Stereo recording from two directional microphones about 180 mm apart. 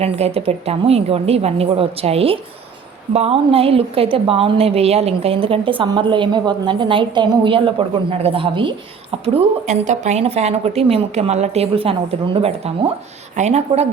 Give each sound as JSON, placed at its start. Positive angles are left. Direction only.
{"t": 0.0, "sound": "a woman's voice", "side_deg": -35}